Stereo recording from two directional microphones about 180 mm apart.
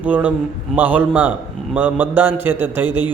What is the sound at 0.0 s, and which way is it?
A man's voice, 10° right (ahead or behind).